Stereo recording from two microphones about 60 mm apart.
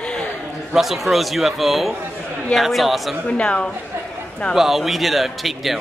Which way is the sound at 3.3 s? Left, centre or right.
Centre.